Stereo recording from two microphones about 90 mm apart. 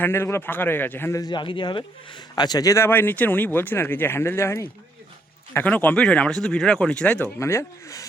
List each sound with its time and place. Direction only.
0.0 s speech: 25° left (ahead or behind)
1.1 s speech: 50° left (ahead or behind); by 4.7 s 30° left (ahead or behind)
5.6 s speech: 15° left (ahead or behind)
7.3 s speech: 30° left (ahead or behind)